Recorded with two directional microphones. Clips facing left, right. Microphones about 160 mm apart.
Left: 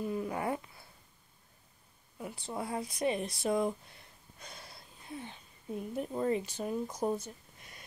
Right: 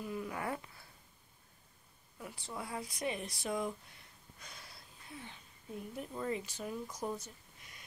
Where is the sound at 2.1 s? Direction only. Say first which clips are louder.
Left 6 dB; 25° left (ahead or behind).